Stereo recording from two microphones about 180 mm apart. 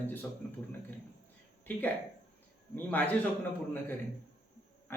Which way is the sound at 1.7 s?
10° left (ahead or behind).